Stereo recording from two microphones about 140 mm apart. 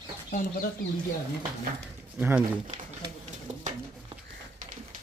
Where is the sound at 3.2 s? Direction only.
55° right (ahead or behind).